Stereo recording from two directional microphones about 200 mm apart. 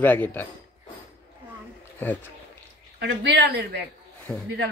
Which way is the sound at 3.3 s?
55° right (ahead or behind).